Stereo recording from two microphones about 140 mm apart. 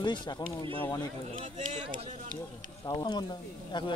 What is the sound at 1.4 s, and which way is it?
Speech, 65° right (ahead or behind).